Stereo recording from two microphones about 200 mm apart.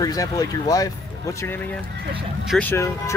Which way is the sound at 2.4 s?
Centre (ahead or behind).